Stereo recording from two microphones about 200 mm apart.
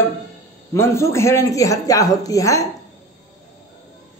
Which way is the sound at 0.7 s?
15° left (ahead or behind).